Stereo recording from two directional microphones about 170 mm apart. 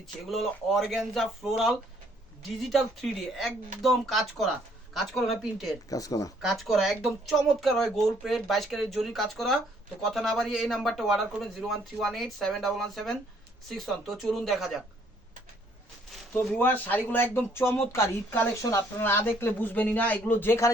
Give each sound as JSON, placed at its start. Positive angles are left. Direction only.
{"t": 0.0, "sound": "speech", "side_deg": 0}
{"t": 5.9, "sound": "speech", "side_deg": 20}
{"t": 6.4, "sound": "speech", "side_deg": 0}
{"t": 16.5, "sound": "speech", "side_deg": 10}